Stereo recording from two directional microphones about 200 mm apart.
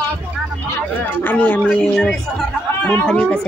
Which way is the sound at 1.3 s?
10° left (ahead or behind).